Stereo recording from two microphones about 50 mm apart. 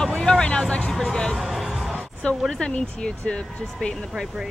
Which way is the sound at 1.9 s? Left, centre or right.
Left.